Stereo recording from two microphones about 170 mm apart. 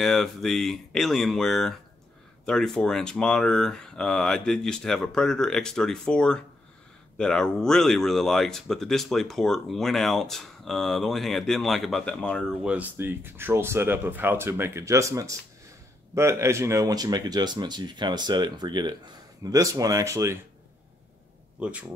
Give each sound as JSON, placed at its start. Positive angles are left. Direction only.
{"t": 0.0, "sound": "speech", "side_deg": 0}
{"t": 12.6, "sound": "speech", "side_deg": -10}
{"t": 21.5, "sound": "a man's voice", "side_deg": -5}